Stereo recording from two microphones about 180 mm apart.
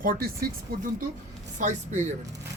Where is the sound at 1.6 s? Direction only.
40° right (ahead or behind).